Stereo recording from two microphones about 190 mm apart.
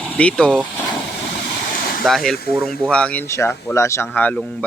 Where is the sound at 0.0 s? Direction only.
5° left (ahead or behind).